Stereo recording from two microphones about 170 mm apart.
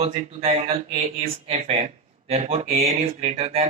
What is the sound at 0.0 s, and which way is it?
Speech, 35° right (ahead or behind).